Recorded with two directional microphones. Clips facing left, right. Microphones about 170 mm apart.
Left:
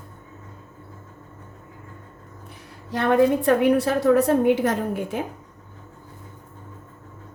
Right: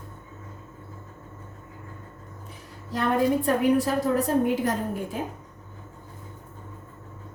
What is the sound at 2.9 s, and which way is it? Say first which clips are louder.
A woman's voice: left 5 dB; 70° left (ahead or behind).